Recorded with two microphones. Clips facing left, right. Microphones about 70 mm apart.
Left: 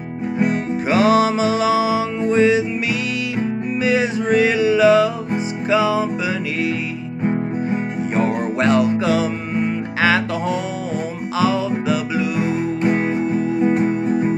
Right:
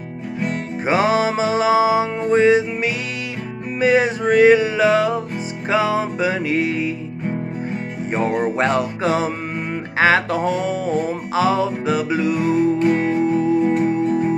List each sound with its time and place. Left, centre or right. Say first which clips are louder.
0.8 s music: left 2 dB; right
3.8 s music: right 3 dB; right
8.1 s music: right 1 dB; right
12.4 s music: right 3 dB; left